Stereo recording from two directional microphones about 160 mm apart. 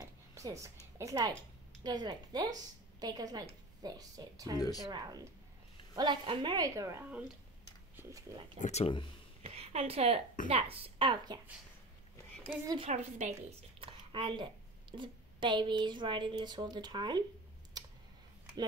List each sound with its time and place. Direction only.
0.0 s a sound: 20° right (ahead or behind)
0.9 s a woman's voice: 20° right (ahead or behind)
4.6 s speech: 25° left (ahead or behind)
4.9 s a woman's voice: 25° right (ahead or behind)
7.9 s a sound: 15° right (ahead or behind)
8.5 s speech: 45° left (ahead or behind)
9.4 s a sound: 40° right (ahead or behind)
10.5 s a woman's voice: 35° right (ahead or behind)
12.6 s a woman's voice: 30° right (ahead or behind)
13.2 s a woman's voice: 45° right (ahead or behind)
13.7 s a woman's voice: 35° right (ahead or behind)